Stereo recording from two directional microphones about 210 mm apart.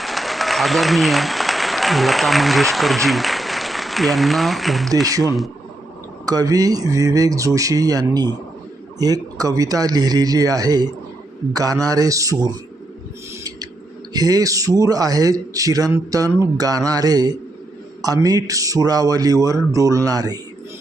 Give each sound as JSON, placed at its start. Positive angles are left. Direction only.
{"t": 0.0, "sound": "speech", "side_deg": 0}
{"t": 5.0, "sound": "a man's voice", "side_deg": -15}
{"t": 14.1, "sound": "a man's voice", "side_deg": -15}